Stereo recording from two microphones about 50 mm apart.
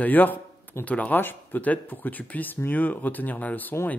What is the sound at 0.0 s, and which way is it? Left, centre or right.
A man's voice, left.